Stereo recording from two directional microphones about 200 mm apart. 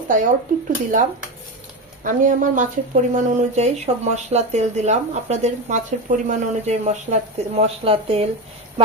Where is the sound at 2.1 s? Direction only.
40° right (ahead or behind).